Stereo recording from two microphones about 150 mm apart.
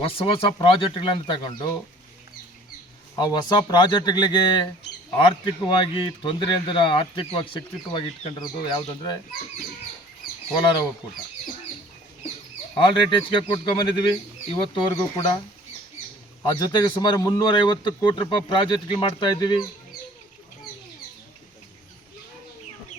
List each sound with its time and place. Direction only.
0.0 s speech: 40° left (ahead or behind)
3.2 s speech: 30° left (ahead or behind)
10.6 s speech: 30° left (ahead or behind)
12.7 s speech: 35° left (ahead or behind)
16.4 s speech: 25° left (ahead or behind)